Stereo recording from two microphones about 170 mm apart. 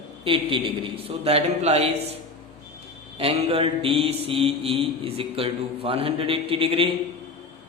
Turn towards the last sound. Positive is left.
turn(degrees=-30)  # may be behind; listen again after turning